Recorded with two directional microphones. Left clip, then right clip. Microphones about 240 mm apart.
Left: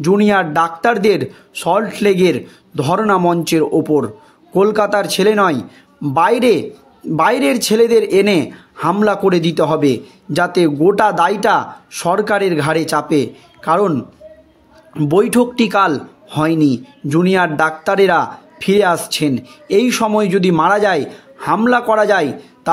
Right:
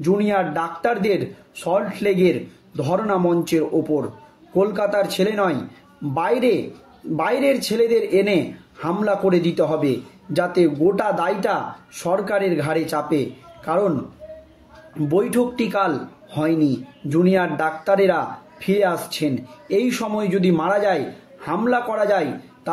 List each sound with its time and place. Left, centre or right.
0.0 s a man's voice: left
15.0 s a man's voice: left